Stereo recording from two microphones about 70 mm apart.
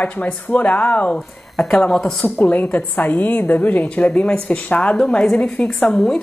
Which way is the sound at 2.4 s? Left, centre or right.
Left.